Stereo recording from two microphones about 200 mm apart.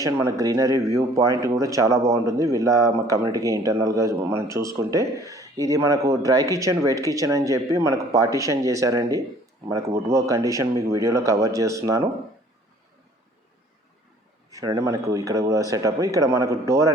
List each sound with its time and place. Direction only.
0.0 s speech: 15° right (ahead or behind)
14.5 s speech: 20° right (ahead or behind)